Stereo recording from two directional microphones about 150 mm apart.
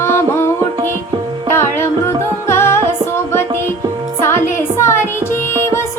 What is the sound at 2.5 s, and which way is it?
Music, 15° left (ahead or behind).